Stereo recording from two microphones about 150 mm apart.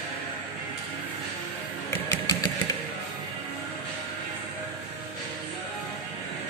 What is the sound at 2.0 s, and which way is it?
Engine, 25° left (ahead or behind).